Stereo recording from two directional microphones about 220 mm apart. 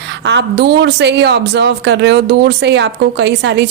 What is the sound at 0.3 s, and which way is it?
Speech, 50° right (ahead or behind).